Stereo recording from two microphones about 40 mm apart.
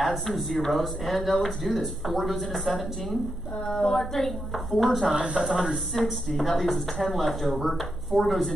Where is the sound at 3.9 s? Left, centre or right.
Centre.